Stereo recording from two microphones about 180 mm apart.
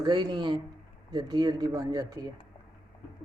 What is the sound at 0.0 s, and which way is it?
Speech, 25° right (ahead or behind).